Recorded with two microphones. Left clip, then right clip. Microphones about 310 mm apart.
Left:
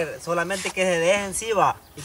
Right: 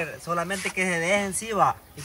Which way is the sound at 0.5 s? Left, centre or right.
Centre.